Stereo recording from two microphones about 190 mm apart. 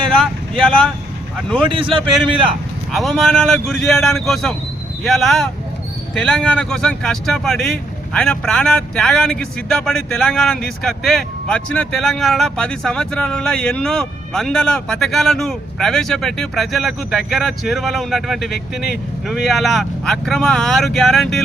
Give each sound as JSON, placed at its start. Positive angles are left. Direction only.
{"t": 1.7, "sound": "a man's voice", "side_deg": -30}
{"t": 2.9, "sound": "speech", "side_deg": 0}